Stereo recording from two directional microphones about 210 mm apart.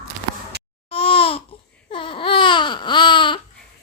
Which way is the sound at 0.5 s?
50° right (ahead or behind).